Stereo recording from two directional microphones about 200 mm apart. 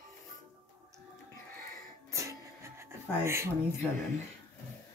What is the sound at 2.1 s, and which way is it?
Music, 15° right (ahead or behind).